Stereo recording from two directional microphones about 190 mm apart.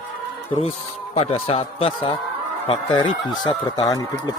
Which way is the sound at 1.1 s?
30° left (ahead or behind).